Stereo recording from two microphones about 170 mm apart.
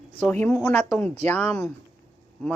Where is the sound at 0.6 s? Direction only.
15° left (ahead or behind).